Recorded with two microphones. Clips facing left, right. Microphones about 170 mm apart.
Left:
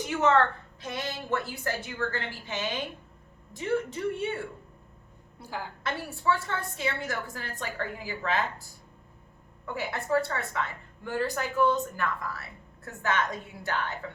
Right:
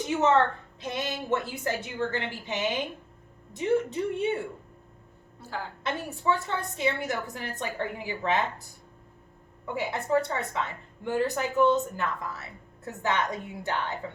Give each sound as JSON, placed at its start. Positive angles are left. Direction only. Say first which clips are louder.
{"t": 0.0, "sound": "a woman's voice", "louder": "right 1 dB", "side_deg": -20}
{"t": 5.4, "sound": "a woman's voice", "louder": "right 1 dB", "side_deg": 15}
{"t": 5.8, "sound": "a woman's voice", "louder": "even", "side_deg": -20}
{"t": 9.6, "sound": "a woman's voice", "louder": "right 2 dB", "side_deg": -20}